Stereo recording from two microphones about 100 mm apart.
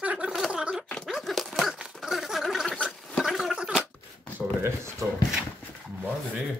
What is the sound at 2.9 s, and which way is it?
Gargling, 5° left (ahead or behind).